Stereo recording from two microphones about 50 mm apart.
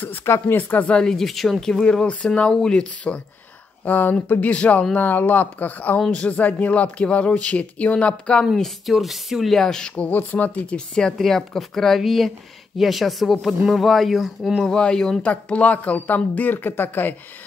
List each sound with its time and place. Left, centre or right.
0.2 s speech: left
0.6 s speech: left
0.8 s speech: left
1.1 s speech: centre
1.6 s speech: centre
3.8 s speech: left
8.8 s speech: centre
9.9 s speech: left
11.1 s speech: centre
14.6 s speech: centre
15.2 s speech: left
16.3 s speech: left